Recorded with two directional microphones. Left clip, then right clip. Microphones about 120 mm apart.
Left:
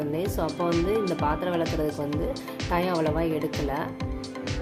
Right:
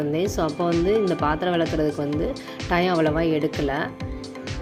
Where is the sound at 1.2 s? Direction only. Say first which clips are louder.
Right 4 dB; 20° right (ahead or behind).